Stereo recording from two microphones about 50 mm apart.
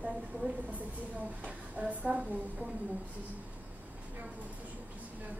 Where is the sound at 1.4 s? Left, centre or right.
Right.